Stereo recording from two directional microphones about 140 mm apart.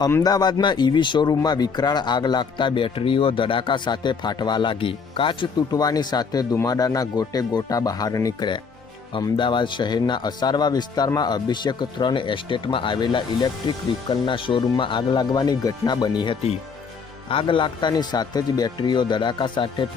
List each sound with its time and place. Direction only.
0.1 s speech: 25° left (ahead or behind)